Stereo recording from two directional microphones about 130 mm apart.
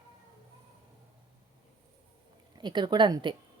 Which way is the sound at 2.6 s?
35° right (ahead or behind).